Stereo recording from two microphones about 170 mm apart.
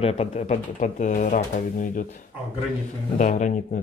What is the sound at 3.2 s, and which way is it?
Speech, 45° left (ahead or behind).